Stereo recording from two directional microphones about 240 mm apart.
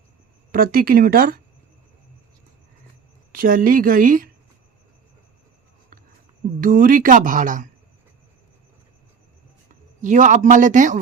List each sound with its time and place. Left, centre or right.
0.5 s speech: right
3.3 s speech: right
6.6 s speech: right
10.0 s speech: right